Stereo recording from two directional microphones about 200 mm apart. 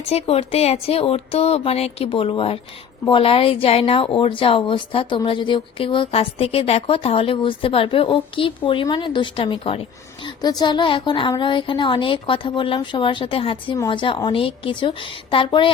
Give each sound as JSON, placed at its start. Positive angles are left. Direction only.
{"t": 0.1, "sound": "a woman's voice", "side_deg": 30}